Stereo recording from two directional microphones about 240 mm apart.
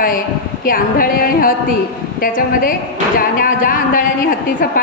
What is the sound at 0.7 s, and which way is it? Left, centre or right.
A man's voice, left.